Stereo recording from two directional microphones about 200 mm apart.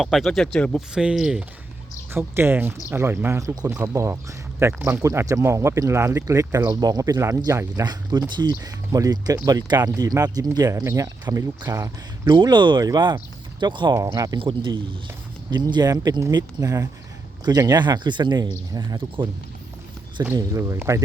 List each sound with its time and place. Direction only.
0.0 s speech: centre (ahead or behind)